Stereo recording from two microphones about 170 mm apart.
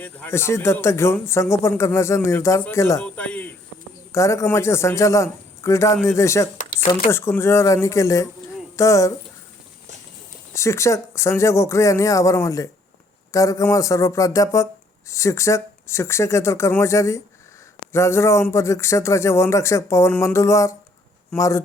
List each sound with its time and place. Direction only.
0.0 s speech: 10° left (ahead or behind)
4.1 s speech: 15° left (ahead or behind)
10.5 s speech: 15° left (ahead or behind)